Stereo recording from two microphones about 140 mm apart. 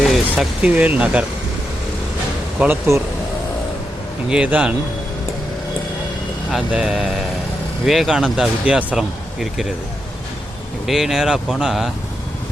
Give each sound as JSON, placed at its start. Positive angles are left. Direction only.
{"t": 0.0, "sound": "speech", "side_deg": 0}
{"t": 2.9, "sound": "speech", "side_deg": -20}
{"t": 4.3, "sound": "a man's voice", "side_deg": -10}
{"t": 6.5, "sound": "speech", "side_deg": -5}
{"t": 10.8, "sound": "speech", "side_deg": 0}